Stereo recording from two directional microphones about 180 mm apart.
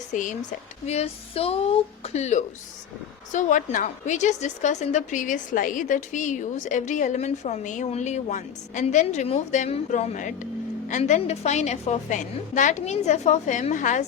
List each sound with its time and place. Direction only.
0.1 s a woman's voice: 45° left (ahead or behind)